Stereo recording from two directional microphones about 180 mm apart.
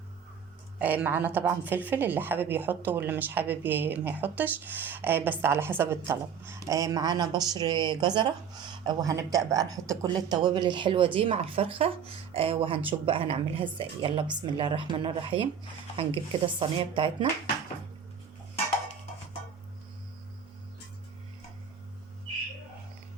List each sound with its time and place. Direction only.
0.8 s a woman's voice: 10° right (ahead or behind); by 17.2 s 30° right (ahead or behind)